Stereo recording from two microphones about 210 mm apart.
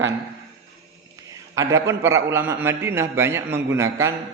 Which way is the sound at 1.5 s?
15° right (ahead or behind).